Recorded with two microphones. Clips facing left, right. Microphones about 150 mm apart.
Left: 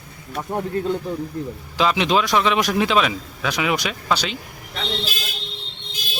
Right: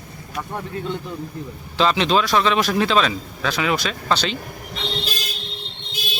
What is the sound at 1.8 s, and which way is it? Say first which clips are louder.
A man's voice: right 1 dB; 10° left (ahead or behind).